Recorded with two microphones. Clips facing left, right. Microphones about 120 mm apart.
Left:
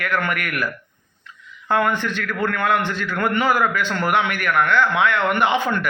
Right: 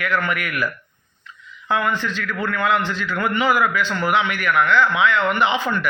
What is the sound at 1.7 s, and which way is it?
A man's voice, 55° left (ahead or behind).